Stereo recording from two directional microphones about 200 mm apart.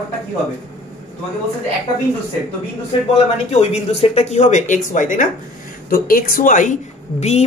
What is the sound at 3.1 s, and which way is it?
Speech, 30° left (ahead or behind).